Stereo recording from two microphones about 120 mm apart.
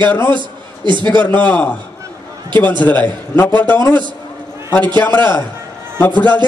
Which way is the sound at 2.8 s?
15° left (ahead or behind).